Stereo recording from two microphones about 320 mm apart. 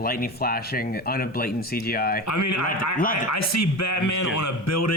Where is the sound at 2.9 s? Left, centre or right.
Left.